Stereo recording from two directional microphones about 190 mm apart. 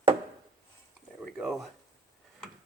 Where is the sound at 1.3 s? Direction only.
Centre (ahead or behind).